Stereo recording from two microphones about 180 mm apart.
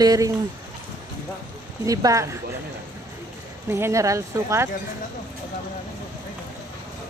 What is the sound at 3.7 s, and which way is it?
Speech, 15° right (ahead or behind).